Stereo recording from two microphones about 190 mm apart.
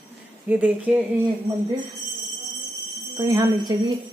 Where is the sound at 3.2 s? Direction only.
15° right (ahead or behind).